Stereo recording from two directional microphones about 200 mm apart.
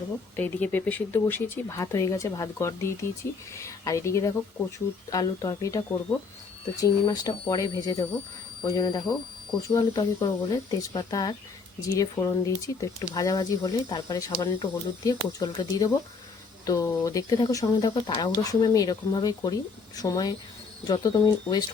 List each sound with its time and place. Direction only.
0.3 s speech: 10° left (ahead or behind)